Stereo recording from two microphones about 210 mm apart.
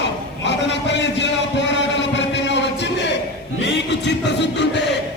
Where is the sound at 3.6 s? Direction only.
55° left (ahead or behind).